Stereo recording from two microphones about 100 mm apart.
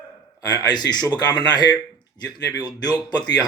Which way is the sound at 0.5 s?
45° left (ahead or behind).